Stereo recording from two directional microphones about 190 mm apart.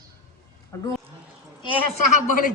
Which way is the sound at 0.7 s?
15° left (ahead or behind).